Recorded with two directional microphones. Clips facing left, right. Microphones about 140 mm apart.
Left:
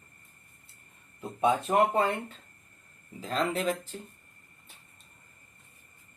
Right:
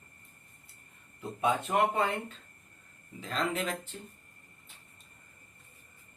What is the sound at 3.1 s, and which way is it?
Speech, 35° left (ahead or behind).